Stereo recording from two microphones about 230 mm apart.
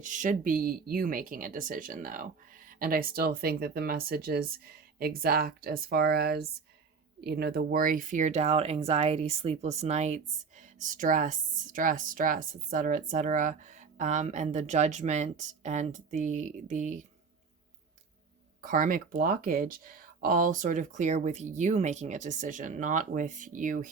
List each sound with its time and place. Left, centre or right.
0.0 s speech: right
18.6 s speech: right